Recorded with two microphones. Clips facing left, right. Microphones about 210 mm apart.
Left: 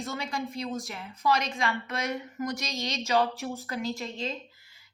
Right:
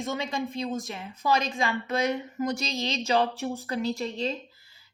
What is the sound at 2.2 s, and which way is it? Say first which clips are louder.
Speech: right 4 dB; 30° right (ahead or behind).